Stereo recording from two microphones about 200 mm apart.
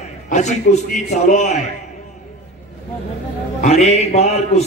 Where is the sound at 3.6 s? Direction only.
30° left (ahead or behind).